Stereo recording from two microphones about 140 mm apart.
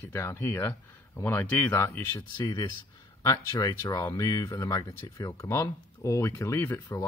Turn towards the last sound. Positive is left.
turn(degrees=15)  # may be behind; listen again after turning